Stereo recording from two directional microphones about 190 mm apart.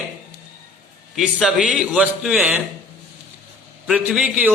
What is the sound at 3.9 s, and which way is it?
Speech, 5° right (ahead or behind).